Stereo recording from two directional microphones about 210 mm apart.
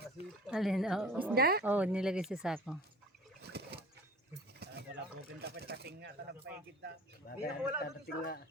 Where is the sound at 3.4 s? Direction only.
50° right (ahead or behind).